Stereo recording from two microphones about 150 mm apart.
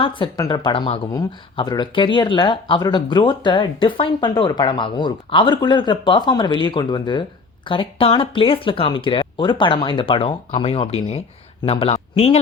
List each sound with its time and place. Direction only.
0.0 s speech: 35° left (ahead or behind)